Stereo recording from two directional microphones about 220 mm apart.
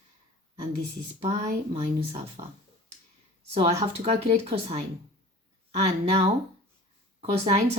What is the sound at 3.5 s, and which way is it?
Speech, 25° right (ahead or behind).